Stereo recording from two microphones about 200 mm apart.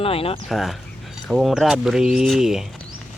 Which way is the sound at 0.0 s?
30° left (ahead or behind).